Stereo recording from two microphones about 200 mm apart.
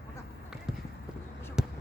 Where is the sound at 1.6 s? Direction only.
5° right (ahead or behind).